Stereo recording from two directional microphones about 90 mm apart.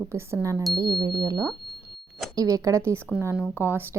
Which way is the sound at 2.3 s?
40° right (ahead or behind).